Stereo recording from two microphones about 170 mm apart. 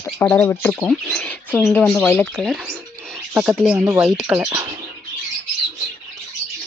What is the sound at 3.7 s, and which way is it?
Speech, 5° right (ahead or behind).